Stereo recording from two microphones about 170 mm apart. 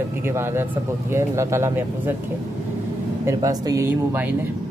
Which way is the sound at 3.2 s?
20° right (ahead or behind).